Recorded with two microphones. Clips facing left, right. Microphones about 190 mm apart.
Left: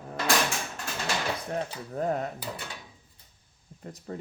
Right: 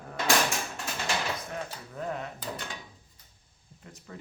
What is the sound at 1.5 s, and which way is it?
Speech, 40° left (ahead or behind).